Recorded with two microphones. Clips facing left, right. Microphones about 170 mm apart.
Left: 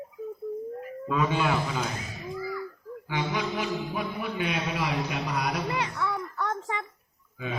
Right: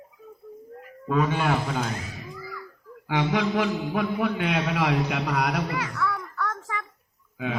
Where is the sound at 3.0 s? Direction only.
80° right.